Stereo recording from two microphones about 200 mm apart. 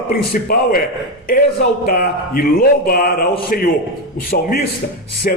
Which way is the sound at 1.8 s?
45° left (ahead or behind).